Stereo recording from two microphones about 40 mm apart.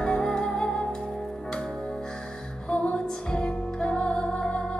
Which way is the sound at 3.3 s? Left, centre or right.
Left.